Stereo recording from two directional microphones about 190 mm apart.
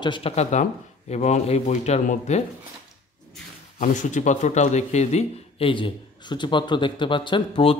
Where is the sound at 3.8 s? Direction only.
40° left (ahead or behind).